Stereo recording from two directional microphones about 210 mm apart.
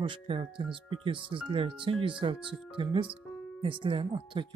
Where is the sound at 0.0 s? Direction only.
25° right (ahead or behind).